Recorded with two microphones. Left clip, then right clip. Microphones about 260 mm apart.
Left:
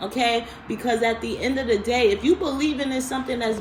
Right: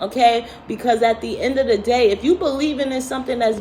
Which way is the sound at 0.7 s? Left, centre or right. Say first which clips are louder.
Right 6 dB; centre.